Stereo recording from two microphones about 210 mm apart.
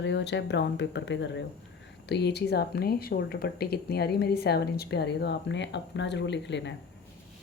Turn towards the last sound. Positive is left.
turn(degrees=55)  # may be behind; listen again after turning